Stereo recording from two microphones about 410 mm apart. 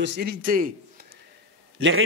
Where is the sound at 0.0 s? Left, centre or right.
Right.